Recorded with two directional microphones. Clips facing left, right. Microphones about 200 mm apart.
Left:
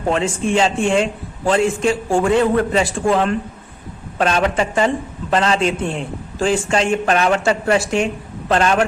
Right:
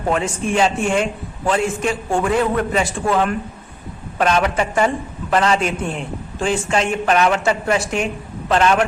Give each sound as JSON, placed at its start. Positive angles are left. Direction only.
{"t": 0.1, "sound": "speech", "side_deg": 30}